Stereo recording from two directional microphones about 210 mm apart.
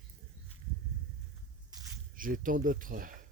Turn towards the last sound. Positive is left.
turn(degrees=-40)  # may be behind; listen again after turning